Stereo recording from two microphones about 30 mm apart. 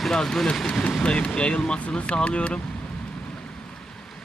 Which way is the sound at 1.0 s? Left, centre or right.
Left.